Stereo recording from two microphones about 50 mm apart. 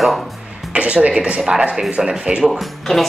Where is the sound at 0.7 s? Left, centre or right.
Right.